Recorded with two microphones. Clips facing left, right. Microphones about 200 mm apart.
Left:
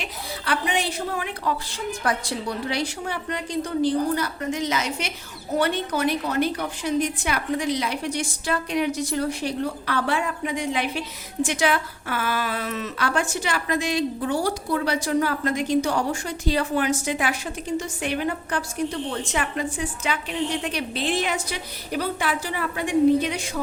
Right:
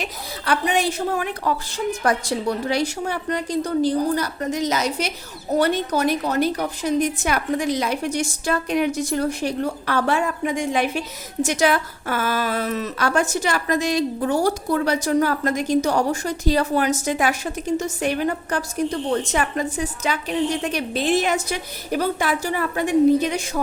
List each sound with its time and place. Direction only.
0.0 s a woman's voice: 45° right (ahead or behind)